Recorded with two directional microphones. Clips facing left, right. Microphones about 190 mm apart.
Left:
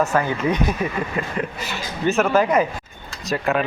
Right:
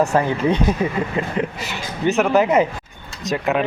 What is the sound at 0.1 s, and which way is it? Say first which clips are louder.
Speech: right 3 dB; 30° right (ahead or behind).